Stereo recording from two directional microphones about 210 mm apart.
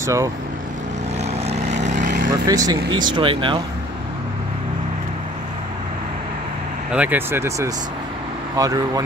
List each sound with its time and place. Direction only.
0.0 s speech: 15° right (ahead or behind)
1.4 s vehicle: 30° right (ahead or behind)
2.4 s speech: 15° right (ahead or behind)
6.9 s speech: 5° right (ahead or behind)